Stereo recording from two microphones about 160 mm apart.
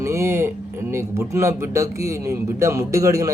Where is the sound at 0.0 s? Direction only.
15° right (ahead or behind).